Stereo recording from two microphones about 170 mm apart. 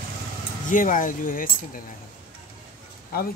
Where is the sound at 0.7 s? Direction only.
50° left (ahead or behind).